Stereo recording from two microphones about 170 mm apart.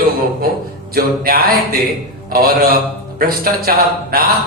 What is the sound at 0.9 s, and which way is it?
A man's voice, 60° right (ahead or behind).